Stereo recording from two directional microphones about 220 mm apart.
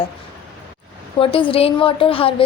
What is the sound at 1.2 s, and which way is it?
A woman's voice, 25° left (ahead or behind).